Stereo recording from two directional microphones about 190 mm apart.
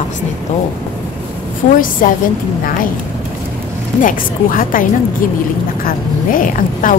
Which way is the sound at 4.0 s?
45° left (ahead or behind).